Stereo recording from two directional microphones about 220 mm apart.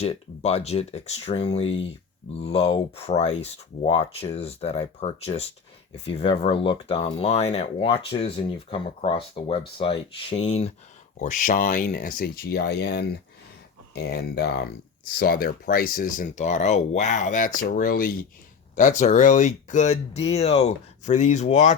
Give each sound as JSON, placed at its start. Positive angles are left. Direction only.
{"t": 0.0, "sound": "speech", "side_deg": 30}